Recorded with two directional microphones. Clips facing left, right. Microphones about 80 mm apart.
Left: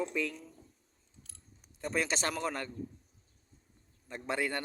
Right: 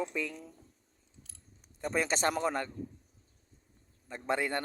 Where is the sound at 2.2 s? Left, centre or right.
Right.